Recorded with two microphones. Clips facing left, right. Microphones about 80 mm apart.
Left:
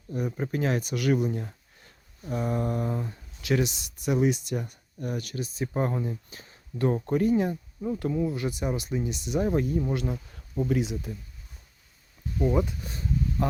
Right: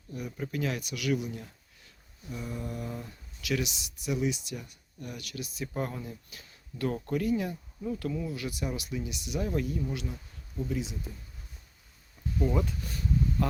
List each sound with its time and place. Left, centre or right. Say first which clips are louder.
0.1 s speech: left 6 dB; left
12.4 s speech: left 4 dB; centre